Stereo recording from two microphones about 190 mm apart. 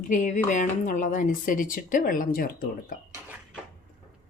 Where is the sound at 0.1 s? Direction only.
40° left (ahead or behind).